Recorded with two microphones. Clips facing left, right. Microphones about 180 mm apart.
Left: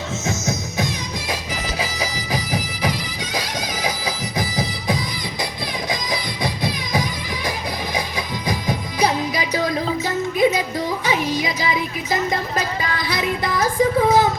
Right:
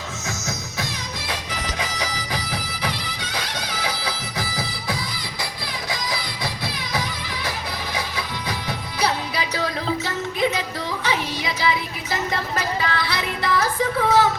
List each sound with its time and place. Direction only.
0.3 s music: 20° left (ahead or behind)
1.8 s bagpipes: 10° left (ahead or behind)
5.9 s music: 20° left (ahead or behind)